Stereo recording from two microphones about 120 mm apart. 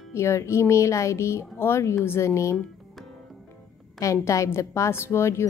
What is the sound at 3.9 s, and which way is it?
A woman's voice, 25° left (ahead or behind).